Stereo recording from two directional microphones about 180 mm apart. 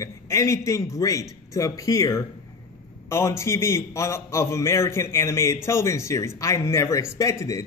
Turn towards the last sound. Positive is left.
turn(degrees=15)  # may be behind; listen again after turning